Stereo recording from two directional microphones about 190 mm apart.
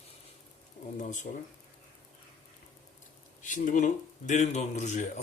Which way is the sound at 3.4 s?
40° left (ahead or behind).